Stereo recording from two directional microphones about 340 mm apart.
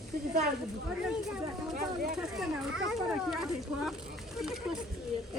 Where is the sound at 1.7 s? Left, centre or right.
Right.